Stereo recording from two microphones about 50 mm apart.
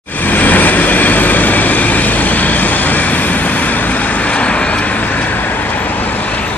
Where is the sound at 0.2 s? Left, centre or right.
Left.